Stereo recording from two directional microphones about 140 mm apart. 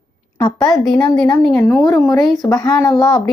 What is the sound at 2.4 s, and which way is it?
Speech, 25° left (ahead or behind).